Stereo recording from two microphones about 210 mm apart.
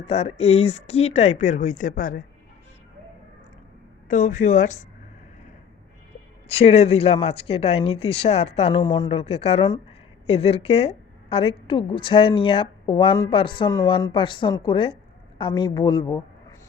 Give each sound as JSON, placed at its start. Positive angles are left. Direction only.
{"t": 0.0, "sound": "speech", "side_deg": 30}
{"t": 4.1, "sound": "speech", "side_deg": 40}
{"t": 6.7, "sound": "a woman's voice", "side_deg": 30}